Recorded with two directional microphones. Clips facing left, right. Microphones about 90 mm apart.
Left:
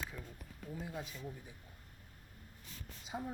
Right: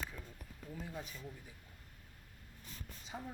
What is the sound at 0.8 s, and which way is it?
Speech, 20° left (ahead or behind).